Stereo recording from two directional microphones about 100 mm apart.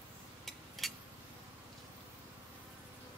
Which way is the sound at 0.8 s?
Centre (ahead or behind).